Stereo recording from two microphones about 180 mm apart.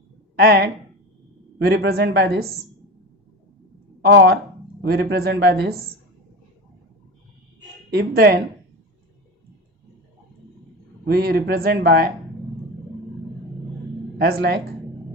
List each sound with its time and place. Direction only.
0.3 s speech: 60° right (ahead or behind)
4.0 s speech: 65° right (ahead or behind)
7.9 s speech: 60° right (ahead or behind)
11.0 s speech: 60° right (ahead or behind)
14.2 s speech: 55° right (ahead or behind)